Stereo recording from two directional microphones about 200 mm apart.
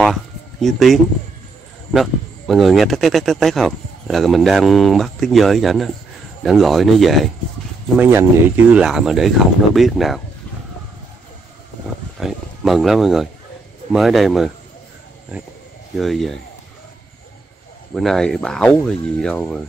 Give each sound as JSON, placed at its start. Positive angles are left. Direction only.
{"t": 0.0, "sound": "a sound", "side_deg": 0}
{"t": 1.9, "sound": "speech", "side_deg": 0}
{"t": 8.0, "sound": "speech", "side_deg": -10}
{"t": 12.2, "sound": "speech", "side_deg": 0}
{"t": 16.0, "sound": "speech", "side_deg": 0}
{"t": 17.9, "sound": "speech", "side_deg": 0}